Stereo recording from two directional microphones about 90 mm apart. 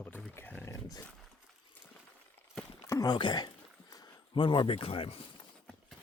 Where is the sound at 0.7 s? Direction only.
40° left (ahead or behind).